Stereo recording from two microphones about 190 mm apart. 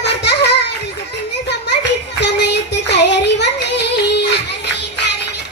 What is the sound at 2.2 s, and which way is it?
Child singing, 65° left (ahead or behind).